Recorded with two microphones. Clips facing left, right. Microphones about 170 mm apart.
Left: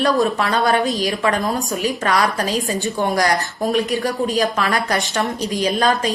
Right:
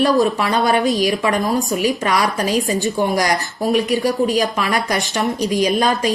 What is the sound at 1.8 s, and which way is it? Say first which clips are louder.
A woman's voice: left 3 dB; 15° right (ahead or behind).